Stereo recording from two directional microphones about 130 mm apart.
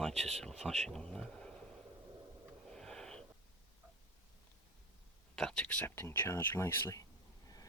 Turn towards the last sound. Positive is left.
turn(degrees=20)  # may be behind; listen again after turning